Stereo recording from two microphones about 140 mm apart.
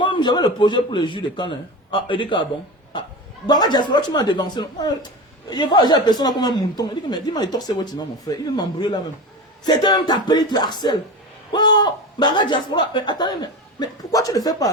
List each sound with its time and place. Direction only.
0.0 s a woman's voice: 35° left (ahead or behind)